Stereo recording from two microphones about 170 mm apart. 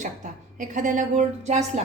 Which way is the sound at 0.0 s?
50° right (ahead or behind).